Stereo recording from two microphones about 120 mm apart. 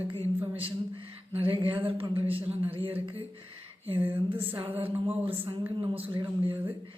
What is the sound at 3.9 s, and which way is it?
Speech, 15° right (ahead or behind).